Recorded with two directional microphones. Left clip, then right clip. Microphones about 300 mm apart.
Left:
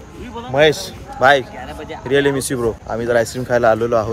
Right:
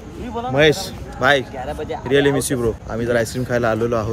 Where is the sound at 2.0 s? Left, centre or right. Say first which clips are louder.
Left 1 dB; centre.